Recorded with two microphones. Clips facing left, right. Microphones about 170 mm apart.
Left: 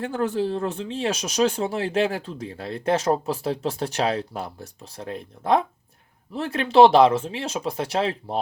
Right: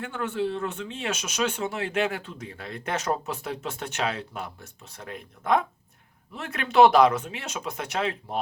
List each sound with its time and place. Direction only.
0.0 s speech: 35° left (ahead or behind)